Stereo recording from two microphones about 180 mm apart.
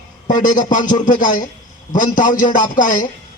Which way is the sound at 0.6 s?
45° left (ahead or behind).